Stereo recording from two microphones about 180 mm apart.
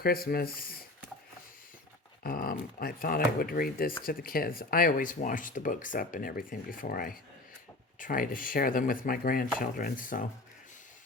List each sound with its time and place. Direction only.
0.0 s speech: 55° left (ahead or behind)
2.2 s speech: 55° left (ahead or behind)